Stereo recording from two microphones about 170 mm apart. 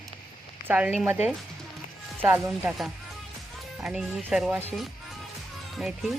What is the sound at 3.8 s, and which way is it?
Speech, 5° right (ahead or behind).